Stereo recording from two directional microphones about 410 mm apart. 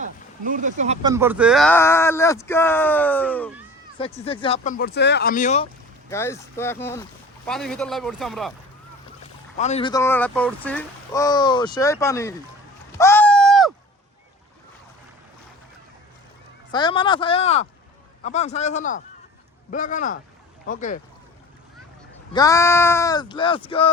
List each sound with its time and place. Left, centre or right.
0.4 s speech: centre
6.1 s speech: centre
9.6 s speech: centre
13.0 s a sound: centre
16.7 s speech: centre
22.3 s speech: centre